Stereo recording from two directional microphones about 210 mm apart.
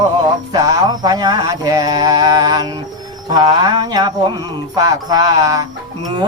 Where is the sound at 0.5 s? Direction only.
20° right (ahead or behind).